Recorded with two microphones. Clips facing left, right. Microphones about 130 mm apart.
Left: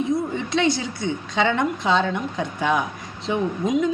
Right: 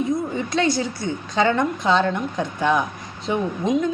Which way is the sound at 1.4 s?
Centre (ahead or behind).